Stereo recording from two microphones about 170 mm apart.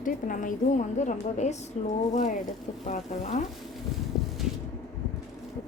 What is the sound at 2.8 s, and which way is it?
Speech, 45° left (ahead or behind).